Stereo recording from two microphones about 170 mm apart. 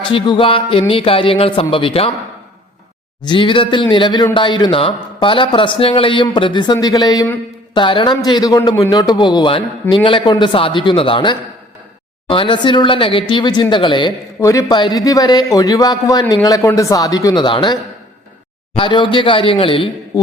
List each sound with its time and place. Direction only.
0.1 s speech: 30° left (ahead or behind)
3.2 s speech: 30° left (ahead or behind)
18.8 s speech: 30° left (ahead or behind)